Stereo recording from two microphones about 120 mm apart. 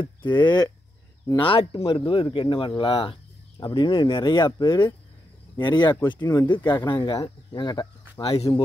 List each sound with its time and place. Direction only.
0.0 s speech: 40° left (ahead or behind)
1.4 s speech: 50° left (ahead or behind)
8.2 s speech: 55° left (ahead or behind)